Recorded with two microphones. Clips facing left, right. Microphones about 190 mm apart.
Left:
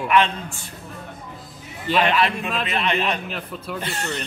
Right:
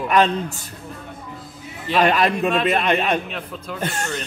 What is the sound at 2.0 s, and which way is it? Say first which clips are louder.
A man's voice: right 4 dB; 45° right (ahead or behind).